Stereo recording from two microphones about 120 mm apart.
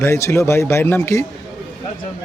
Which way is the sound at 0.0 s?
25° left (ahead or behind).